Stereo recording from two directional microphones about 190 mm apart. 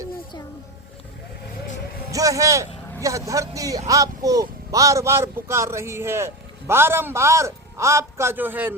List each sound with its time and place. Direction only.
2.1 s speech: 15° right (ahead or behind)